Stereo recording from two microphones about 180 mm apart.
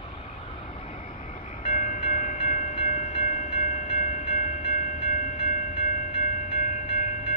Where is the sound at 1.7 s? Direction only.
45° left (ahead or behind).